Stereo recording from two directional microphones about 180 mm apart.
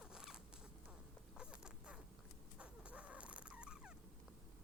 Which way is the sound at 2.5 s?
5° right (ahead or behind).